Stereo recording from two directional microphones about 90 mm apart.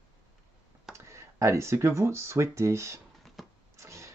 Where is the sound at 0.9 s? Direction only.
30° right (ahead or behind).